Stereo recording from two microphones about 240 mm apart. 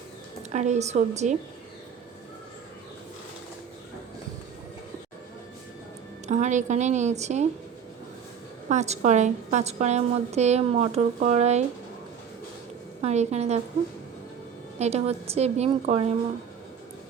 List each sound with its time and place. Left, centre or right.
0.5 s a woman's voice: right
6.2 s a woman's voice: right
8.7 s a woman's voice: right
13.0 s a woman's voice: right
14.8 s a woman's voice: right